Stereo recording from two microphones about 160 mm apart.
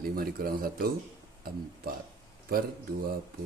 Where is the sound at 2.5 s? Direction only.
70° right (ahead or behind).